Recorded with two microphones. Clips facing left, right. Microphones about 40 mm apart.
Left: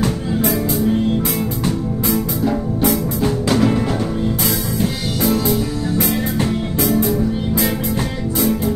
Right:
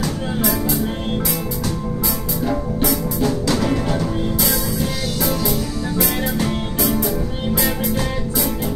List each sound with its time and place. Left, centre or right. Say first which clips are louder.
2.8 s music: left 3 dB; left
3.6 s music: left 3 dB; centre
5.9 s music: left 1 dB; left
7.6 s music: left 1 dB; left